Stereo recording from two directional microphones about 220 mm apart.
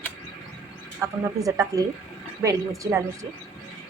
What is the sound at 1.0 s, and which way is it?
A woman's voice, 15° right (ahead or behind).